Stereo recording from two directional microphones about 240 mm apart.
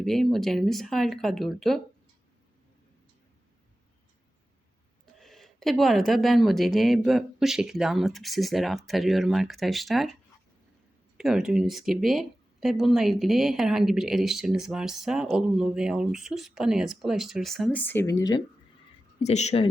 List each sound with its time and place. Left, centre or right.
0.0 s speech: centre
5.1 s speech: centre
11.2 s speech: centre
19.2 s speech: left